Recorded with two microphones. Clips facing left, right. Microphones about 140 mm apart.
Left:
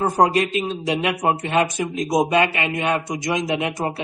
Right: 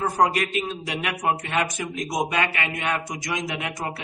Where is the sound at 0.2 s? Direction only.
25° left (ahead or behind).